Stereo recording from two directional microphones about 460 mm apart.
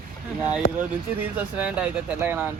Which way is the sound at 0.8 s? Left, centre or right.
Centre.